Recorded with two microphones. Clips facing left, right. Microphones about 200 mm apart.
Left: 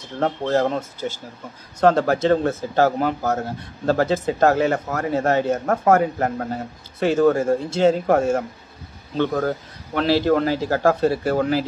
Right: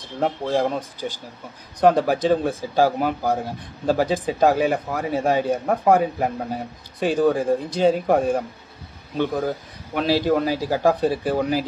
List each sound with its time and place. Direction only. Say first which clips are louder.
0.2 s speech: left 1 dB; 10° right (ahead or behind)